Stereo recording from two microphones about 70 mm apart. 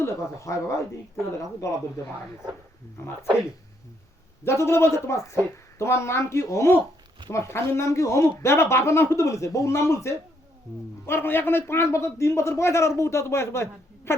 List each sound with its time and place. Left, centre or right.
0.0 s speech: left
3.0 s a man's voice: left
4.4 s a man's voice: left